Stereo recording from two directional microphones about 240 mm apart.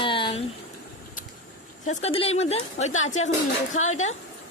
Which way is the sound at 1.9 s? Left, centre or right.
Left.